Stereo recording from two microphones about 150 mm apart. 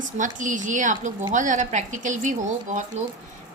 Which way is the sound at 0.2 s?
60° right (ahead or behind).